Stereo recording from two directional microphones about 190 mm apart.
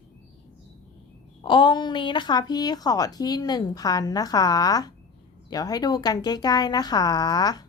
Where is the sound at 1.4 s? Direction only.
25° left (ahead or behind).